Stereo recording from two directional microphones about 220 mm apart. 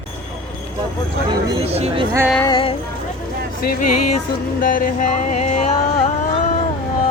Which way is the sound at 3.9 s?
90° left.